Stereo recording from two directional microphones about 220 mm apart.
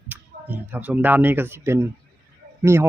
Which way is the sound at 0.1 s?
5° right (ahead or behind).